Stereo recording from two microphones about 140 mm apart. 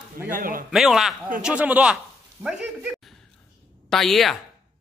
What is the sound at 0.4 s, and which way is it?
Speech, 90° right.